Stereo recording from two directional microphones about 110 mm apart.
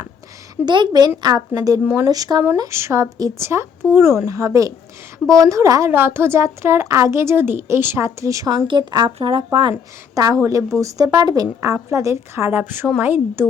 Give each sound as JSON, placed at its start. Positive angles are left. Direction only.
{"t": 0.5, "sound": "speech", "side_deg": -45}
{"t": 1.8, "sound": "speech", "side_deg": -15}
{"t": 2.0, "sound": "speech", "side_deg": -35}
{"t": 2.6, "sound": "a woman's voice", "side_deg": -25}
{"t": 10.2, "sound": "a woman's voice", "side_deg": -35}